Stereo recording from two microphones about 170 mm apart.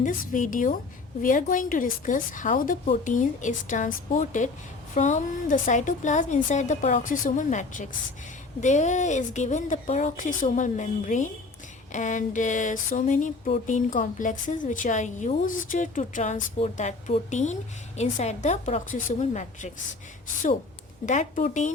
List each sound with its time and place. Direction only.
0.0 s speech: 50° left (ahead or behind)
21.1 s speech: 45° left (ahead or behind)